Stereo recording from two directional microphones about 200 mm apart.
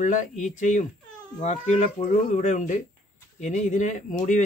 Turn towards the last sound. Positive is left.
turn(degrees=40)  # may be behind; listen again after turning